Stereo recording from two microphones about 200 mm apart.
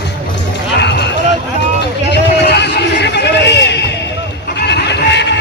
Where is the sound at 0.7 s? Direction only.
60° left (ahead or behind).